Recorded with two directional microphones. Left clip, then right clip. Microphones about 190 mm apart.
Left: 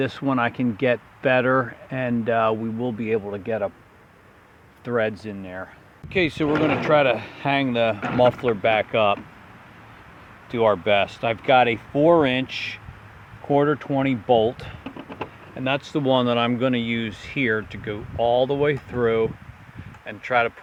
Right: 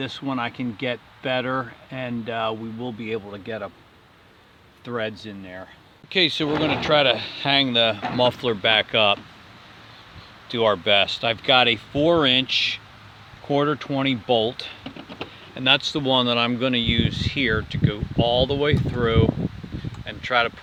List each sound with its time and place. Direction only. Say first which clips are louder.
0.0 s speech: left 5 dB; 30° left (ahead or behind)
4.9 s speech: left 5 dB; 20° left (ahead or behind)
6.1 s speech: even; centre (ahead or behind)
10.5 s speech: even; centre (ahead or behind)
13.5 s speech: left 2 dB; 5° right (ahead or behind)